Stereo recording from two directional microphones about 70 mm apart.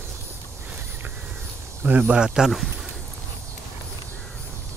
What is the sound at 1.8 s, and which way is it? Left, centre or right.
Speech, right.